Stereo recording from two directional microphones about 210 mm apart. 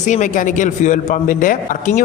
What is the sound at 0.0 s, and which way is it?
A man's voice, 35° left (ahead or behind).